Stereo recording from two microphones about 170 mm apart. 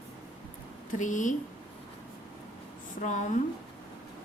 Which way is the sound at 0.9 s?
50° left (ahead or behind).